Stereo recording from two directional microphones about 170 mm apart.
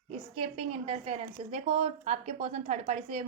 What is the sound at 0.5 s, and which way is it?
A woman's voice, 35° right (ahead or behind).